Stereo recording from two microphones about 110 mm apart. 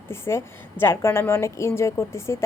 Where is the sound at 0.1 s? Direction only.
25° left (ahead or behind).